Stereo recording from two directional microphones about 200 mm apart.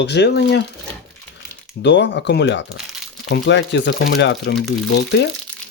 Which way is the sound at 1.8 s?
60° left (ahead or behind).